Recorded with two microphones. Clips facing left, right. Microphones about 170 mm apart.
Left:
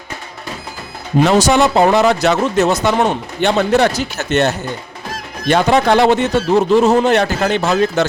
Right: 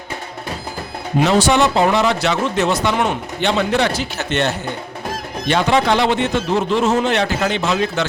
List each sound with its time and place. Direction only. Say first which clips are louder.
1.2 s speech: left 3 dB; 45° left (ahead or behind)